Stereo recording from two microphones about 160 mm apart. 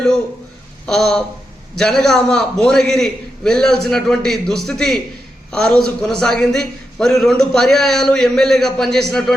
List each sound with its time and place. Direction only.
0.9 s a man's voice: 5° left (ahead or behind)